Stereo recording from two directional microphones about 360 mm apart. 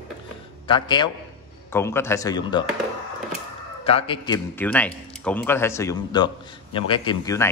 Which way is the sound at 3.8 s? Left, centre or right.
Centre.